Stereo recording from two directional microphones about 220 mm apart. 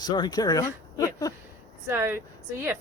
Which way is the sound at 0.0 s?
20° left (ahead or behind).